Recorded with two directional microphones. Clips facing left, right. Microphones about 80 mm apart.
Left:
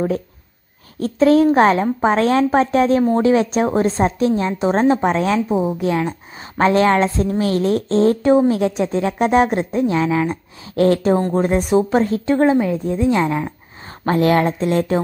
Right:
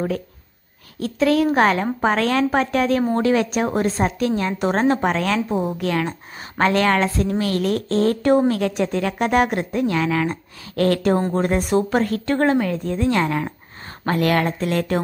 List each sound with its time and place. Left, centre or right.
0.9 s a woman's voice: left; by 13.5 s centre
14.0 s a woman's voice: left